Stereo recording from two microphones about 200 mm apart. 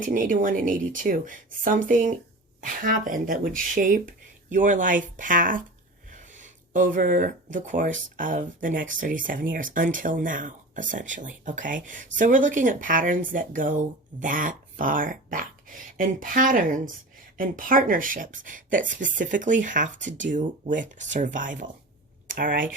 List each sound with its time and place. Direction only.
0.0 s speech: 40° right (ahead or behind)